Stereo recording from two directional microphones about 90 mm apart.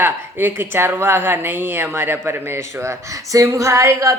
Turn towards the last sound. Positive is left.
turn(degrees=-35)  # may be behind; listen again after turning